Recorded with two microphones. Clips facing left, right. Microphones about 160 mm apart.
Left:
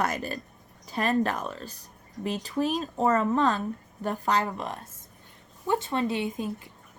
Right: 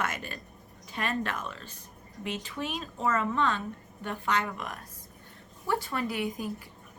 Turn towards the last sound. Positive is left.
turn(degrees=25)  # may be behind; listen again after turning